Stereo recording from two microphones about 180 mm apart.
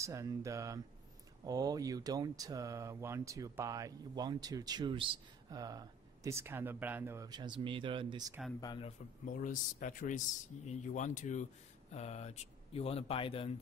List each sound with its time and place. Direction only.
0.0 s speech: 15° right (ahead or behind)
8.5 s speech: 20° left (ahead or behind)
9.2 s speech: 45° left (ahead or behind); by 13.5 s 30° left (ahead or behind)